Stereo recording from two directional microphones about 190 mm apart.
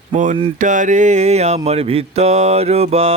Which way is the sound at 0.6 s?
40° right (ahead or behind).